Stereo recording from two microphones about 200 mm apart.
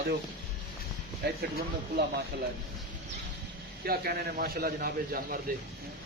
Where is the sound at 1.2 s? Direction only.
55° right (ahead or behind).